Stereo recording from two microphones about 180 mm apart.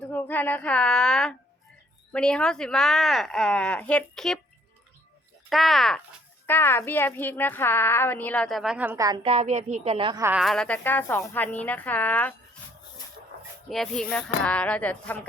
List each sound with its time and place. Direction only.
0.0 s a sound: 10° left (ahead or behind)
2.1 s speech: 5° left (ahead or behind)
5.5 s a woman's voice: centre (ahead or behind)
9.0 s a woman's voice: 30° right (ahead or behind)
10.2 s a woman's voice: 15° right (ahead or behind)
10.4 s a woman's voice: 5° left (ahead or behind)
13.7 s a woman's voice: centre (ahead or behind)